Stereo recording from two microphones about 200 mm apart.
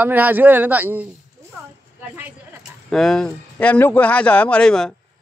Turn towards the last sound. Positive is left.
turn(degrees=5)  # may be behind; listen again after turning